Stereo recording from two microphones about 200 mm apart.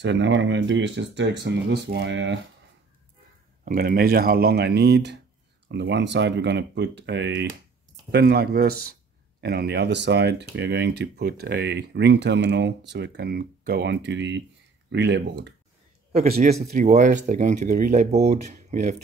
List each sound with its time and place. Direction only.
0.0 s speech: 65° right (ahead or behind)
3.6 s speech: 50° right (ahead or behind)
16.7 s speech: 35° right (ahead or behind)